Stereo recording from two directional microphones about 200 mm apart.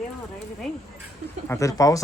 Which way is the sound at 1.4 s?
15° left (ahead or behind).